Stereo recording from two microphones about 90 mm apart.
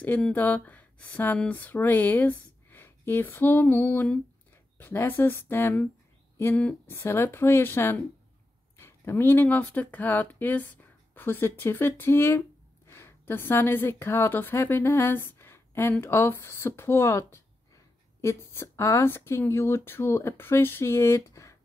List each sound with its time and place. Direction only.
0.3 s speech: 15° left (ahead or behind)
6.9 s speech: 25° left (ahead or behind)